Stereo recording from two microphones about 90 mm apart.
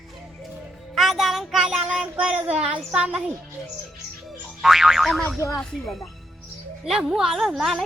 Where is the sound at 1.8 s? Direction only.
15° right (ahead or behind).